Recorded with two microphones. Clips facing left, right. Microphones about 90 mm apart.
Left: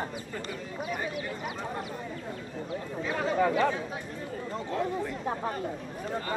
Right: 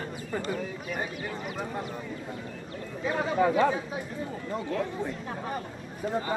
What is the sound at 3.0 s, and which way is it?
Speech, 15° right (ahead or behind).